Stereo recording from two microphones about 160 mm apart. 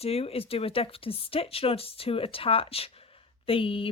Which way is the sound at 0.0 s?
40° left (ahead or behind).